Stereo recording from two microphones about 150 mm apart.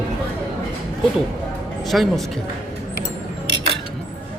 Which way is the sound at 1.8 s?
Centre (ahead or behind).